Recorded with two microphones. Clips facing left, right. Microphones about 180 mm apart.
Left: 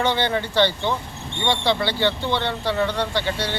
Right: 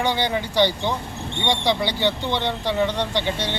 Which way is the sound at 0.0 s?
15° right (ahead or behind).